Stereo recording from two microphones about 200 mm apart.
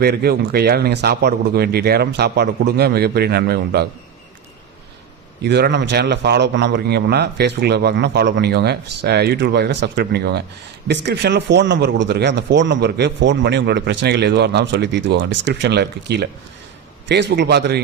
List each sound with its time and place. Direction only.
0.0 s speech: 50° right (ahead or behind)
5.4 s speech: 55° right (ahead or behind)